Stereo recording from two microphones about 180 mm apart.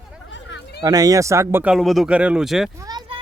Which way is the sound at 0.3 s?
85° left.